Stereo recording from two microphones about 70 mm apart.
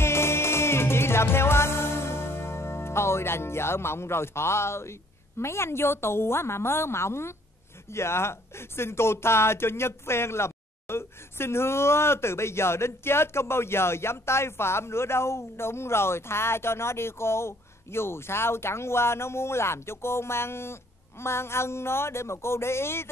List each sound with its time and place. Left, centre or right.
0.0 s music: left
5.4 s speech: left